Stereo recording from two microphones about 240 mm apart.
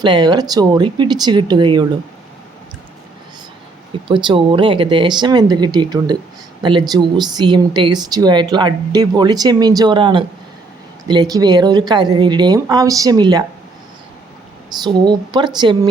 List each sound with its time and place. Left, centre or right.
0.0 s speech: centre
3.9 s speech: centre
14.7 s speech: centre